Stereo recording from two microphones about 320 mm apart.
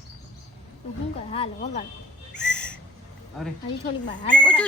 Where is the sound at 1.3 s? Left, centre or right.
Centre.